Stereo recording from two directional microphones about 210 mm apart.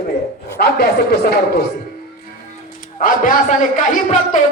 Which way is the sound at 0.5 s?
50° left (ahead or behind).